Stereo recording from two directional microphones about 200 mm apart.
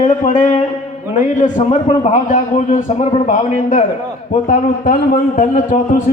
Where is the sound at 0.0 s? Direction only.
40° left (ahead or behind).